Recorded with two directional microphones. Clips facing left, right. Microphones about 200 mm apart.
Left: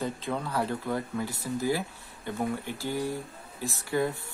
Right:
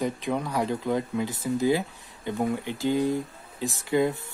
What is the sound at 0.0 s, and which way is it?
Speech, 15° right (ahead or behind).